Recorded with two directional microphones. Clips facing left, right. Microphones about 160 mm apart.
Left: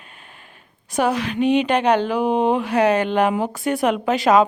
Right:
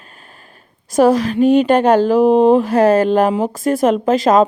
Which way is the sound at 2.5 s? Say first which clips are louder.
Right 6 dB; 40° right (ahead or behind).